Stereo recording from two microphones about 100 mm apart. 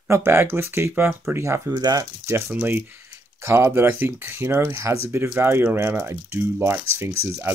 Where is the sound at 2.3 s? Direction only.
20° right (ahead or behind).